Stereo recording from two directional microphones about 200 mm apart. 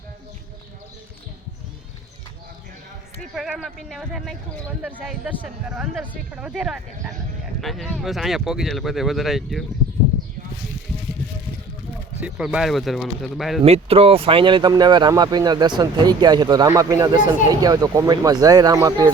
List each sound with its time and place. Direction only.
3.3 s speech: centre (ahead or behind)
12.2 s speech: 5° right (ahead or behind)
13.6 s speech: 30° right (ahead or behind)